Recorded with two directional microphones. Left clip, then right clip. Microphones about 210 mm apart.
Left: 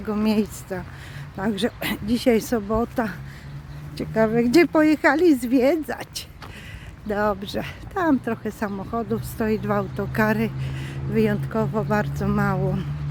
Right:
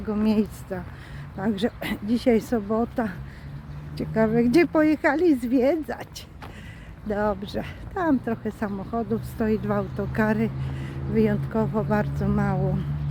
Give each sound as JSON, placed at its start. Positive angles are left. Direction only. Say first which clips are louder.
{"t": 0.1, "sound": "speech", "louder": "left 1 dB", "side_deg": 20}